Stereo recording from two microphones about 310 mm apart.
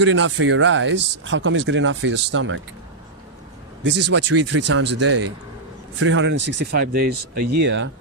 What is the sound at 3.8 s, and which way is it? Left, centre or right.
Speech, right.